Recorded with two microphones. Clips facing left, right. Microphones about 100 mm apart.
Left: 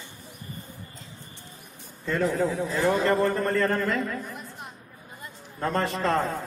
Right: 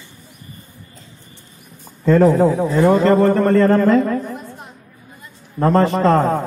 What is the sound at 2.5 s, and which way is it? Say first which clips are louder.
A man's voice: right 10 dB; 40° right (ahead or behind).